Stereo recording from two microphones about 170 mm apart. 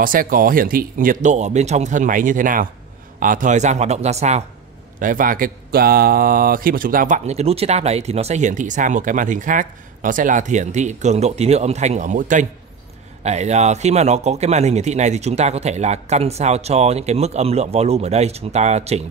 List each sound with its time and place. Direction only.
0.0 s speech: 55° right (ahead or behind)
5.0 s speech: 55° right (ahead or behind)
7.2 s a man's voice: 40° right (ahead or behind)